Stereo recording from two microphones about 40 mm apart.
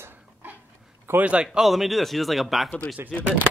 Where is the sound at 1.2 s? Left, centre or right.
Right.